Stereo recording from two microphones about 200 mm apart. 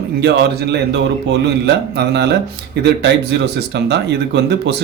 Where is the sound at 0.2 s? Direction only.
55° right (ahead or behind).